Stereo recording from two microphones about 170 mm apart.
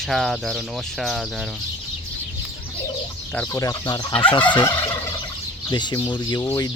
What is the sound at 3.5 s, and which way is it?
Speech, 15° left (ahead or behind).